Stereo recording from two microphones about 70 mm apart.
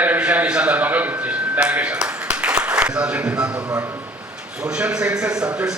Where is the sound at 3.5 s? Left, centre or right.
Right.